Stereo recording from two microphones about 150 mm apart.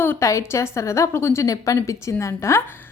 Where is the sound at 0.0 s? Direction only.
15° left (ahead or behind).